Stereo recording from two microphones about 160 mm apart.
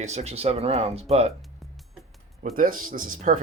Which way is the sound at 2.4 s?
60° right (ahead or behind).